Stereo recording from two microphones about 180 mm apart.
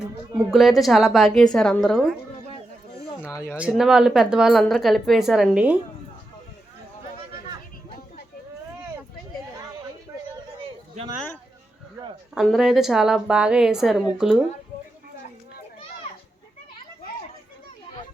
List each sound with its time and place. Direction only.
0.5 s speech: centre (ahead or behind)
3.3 s speech: 15° left (ahead or behind)
3.6 s speech: 5° right (ahead or behind)
12.3 s speech: centre (ahead or behind)